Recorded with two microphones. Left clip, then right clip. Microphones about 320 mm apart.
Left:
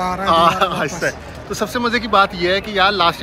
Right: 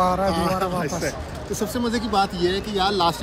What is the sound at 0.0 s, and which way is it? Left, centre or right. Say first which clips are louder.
Speech: right 1 dB; centre.